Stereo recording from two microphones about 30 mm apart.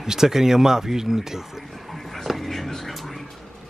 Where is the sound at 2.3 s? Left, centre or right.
Centre.